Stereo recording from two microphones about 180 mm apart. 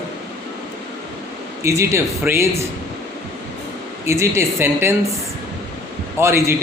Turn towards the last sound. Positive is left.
turn(degrees=-15)  # may be behind; listen again after turning